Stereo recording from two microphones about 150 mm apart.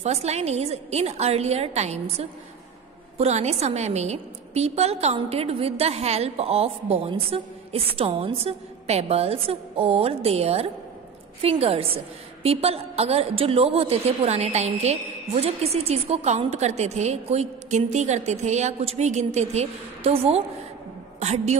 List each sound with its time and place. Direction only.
0.0 s a woman's voice: 45° right (ahead or behind)